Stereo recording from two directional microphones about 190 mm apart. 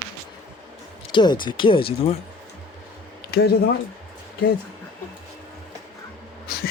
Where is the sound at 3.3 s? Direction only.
60° left (ahead or behind).